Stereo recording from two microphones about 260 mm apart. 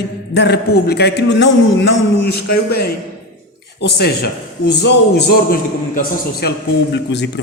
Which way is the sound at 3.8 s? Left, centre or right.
Left.